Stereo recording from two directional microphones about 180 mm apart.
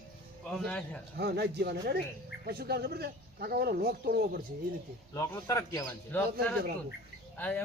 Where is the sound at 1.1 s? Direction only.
65° right (ahead or behind).